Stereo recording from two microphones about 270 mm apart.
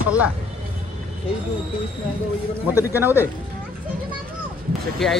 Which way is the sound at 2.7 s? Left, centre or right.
Centre.